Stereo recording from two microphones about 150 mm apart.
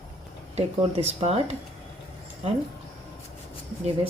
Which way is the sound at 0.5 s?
45° right (ahead or behind).